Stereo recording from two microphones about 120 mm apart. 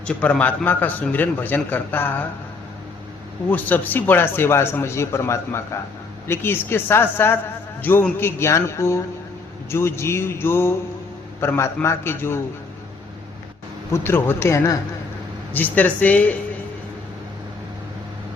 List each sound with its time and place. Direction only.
0.0 s a man's voice: 10° left (ahead or behind)
3.5 s speech: 15° left (ahead or behind)
13.9 s a man's voice: 20° left (ahead or behind)